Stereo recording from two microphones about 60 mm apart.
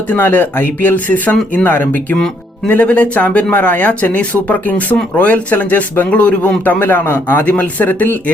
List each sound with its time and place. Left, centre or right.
0.1 s speech: left
2.1 s speech: centre; by 7.4 s left
7.4 s speech: left